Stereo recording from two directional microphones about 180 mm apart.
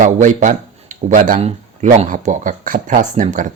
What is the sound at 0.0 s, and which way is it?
Speech, 45° right (ahead or behind).